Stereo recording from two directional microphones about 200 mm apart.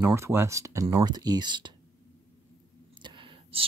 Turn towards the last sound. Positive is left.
turn(degrees=-25)  # may be behind; listen again after turning